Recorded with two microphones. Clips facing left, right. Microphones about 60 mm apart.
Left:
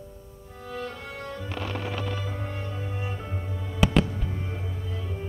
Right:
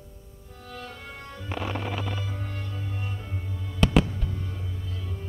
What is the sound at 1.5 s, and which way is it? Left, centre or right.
Music, centre.